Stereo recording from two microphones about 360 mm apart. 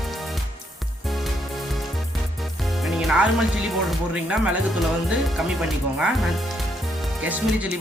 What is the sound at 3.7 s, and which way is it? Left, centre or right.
Speech, centre.